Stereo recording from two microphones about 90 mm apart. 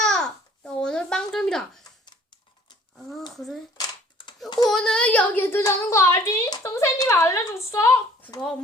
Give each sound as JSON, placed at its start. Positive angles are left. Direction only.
{"t": 0.0, "sound": "babbling", "side_deg": 10}
{"t": 3.3, "sound": "speech", "side_deg": 0}
{"t": 4.4, "sound": "a sound", "side_deg": 55}
{"t": 4.7, "sound": "a woman's voice", "side_deg": 5}
{"t": 6.6, "sound": "a sound", "side_deg": 30}
{"t": 7.2, "sound": "a woman's voice", "side_deg": 30}
{"t": 8.4, "sound": "speech", "side_deg": 10}